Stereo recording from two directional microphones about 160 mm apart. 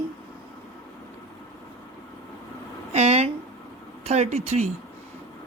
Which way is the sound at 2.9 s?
40° right (ahead or behind).